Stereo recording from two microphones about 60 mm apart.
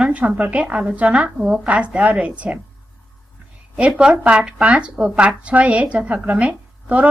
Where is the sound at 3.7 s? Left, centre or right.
Centre.